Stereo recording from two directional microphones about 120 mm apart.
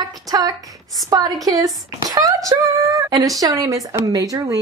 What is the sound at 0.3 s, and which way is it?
Speech, 30° right (ahead or behind).